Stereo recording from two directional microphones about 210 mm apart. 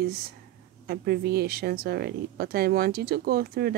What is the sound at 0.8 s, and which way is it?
Speech, 50° right (ahead or behind).